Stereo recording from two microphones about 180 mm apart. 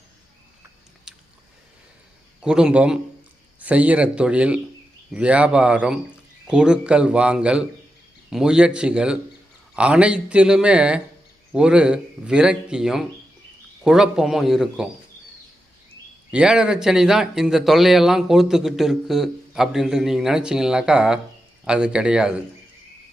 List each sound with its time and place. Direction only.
1.1 s biting: 5° right (ahead or behind)
2.4 s a man's voice: 5° right (ahead or behind)
16.3 s speech: 5° right (ahead or behind)